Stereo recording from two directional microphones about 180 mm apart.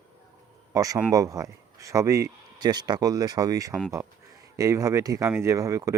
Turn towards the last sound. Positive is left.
turn(degrees=-20)  # may be behind; listen again after turning